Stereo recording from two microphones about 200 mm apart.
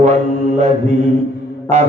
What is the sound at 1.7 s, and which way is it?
Speech, 35° right (ahead or behind).